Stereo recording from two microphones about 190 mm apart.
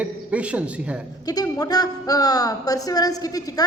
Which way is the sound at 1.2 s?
20° left (ahead or behind).